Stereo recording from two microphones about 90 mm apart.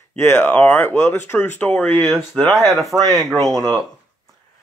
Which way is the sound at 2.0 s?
Centre (ahead or behind).